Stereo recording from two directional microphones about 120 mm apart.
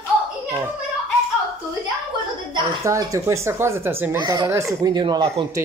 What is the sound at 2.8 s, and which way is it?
Speech, 25° right (ahead or behind).